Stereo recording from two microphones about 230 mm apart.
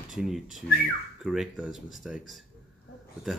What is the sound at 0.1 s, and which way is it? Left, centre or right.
Speech, centre.